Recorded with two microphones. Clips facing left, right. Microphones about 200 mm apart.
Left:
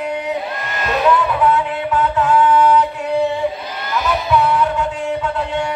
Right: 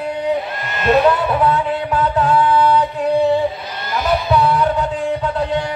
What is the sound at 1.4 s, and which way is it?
Music, 35° right (ahead or behind).